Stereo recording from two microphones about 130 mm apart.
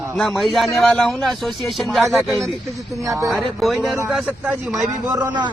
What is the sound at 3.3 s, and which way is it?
Speech, centre (ahead or behind).